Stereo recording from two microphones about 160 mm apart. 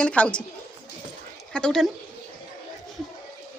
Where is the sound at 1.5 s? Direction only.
5° left (ahead or behind).